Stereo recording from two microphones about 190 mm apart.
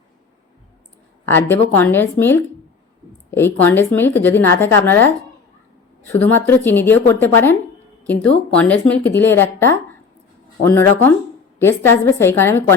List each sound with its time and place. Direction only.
1.2 s speech: 10° left (ahead or behind)